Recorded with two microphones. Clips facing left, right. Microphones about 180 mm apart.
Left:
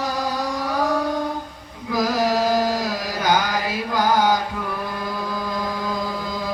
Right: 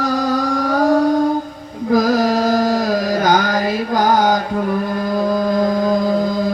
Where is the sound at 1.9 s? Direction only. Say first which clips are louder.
Right 6 dB; 45° right (ahead or behind).